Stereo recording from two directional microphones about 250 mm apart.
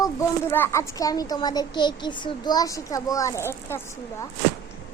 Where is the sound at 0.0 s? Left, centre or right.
Centre.